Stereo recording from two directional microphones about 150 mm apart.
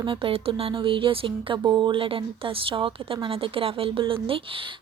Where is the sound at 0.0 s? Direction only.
35° right (ahead or behind).